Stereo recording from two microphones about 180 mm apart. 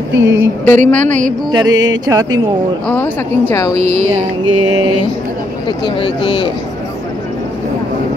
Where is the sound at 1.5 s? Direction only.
20° right (ahead or behind).